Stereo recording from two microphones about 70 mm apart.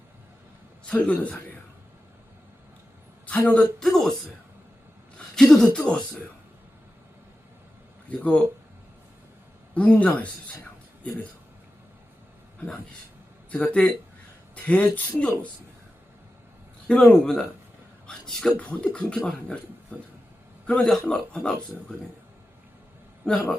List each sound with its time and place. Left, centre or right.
0.9 s speech: centre
3.2 s a sound: centre
3.8 s speech: centre
5.4 s speech: centre
8.2 s speech: centre
9.7 s speech: centre
12.5 s speech: centre
16.9 s speech: centre